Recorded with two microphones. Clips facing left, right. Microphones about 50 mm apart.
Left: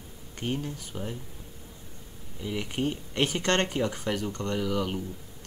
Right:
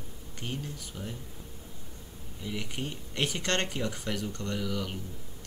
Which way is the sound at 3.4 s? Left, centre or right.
Centre.